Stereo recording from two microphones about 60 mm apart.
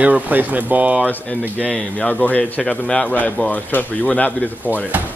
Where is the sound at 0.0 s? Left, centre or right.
Right.